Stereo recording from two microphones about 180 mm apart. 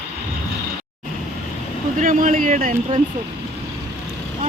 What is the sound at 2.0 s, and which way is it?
Speech, 50° right (ahead or behind).